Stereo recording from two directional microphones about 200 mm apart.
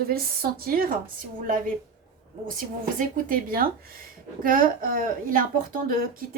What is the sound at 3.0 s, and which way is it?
A woman's voice, 45° right (ahead or behind).